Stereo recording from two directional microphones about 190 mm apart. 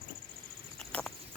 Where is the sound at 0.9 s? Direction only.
5° left (ahead or behind).